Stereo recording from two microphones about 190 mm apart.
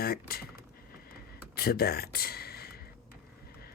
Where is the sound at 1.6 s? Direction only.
55° left (ahead or behind).